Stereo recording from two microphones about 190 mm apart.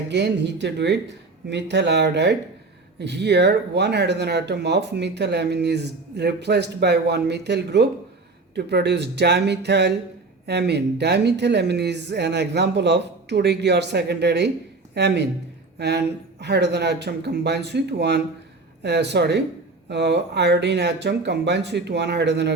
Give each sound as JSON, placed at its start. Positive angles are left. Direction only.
{"t": 0.1, "sound": "speech", "side_deg": -65}